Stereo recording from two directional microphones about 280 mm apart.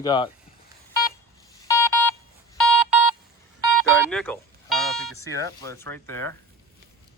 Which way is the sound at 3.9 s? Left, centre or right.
Centre.